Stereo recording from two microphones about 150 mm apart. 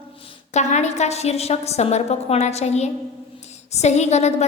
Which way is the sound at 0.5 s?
50° left (ahead or behind).